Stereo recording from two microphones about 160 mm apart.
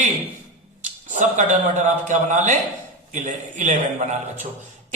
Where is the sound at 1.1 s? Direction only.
50° right (ahead or behind).